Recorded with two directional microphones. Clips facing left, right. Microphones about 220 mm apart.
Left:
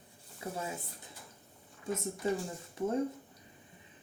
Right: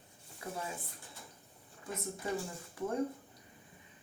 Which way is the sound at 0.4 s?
20° left (ahead or behind).